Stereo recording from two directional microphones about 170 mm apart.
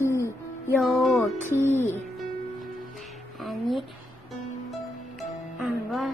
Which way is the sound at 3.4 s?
Centre (ahead or behind).